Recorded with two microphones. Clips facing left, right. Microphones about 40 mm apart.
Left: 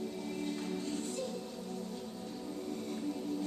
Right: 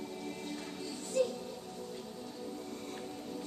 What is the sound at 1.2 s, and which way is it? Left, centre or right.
Music, right.